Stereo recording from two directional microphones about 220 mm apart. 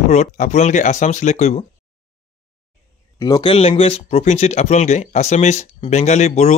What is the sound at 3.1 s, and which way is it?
Speech, 15° left (ahead or behind).